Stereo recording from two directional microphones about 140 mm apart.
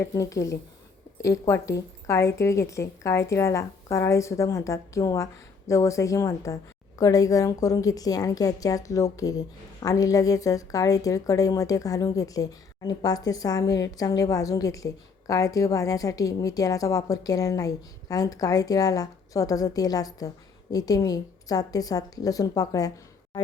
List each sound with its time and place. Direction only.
0.0 s a woman's voice: 20° left (ahead or behind)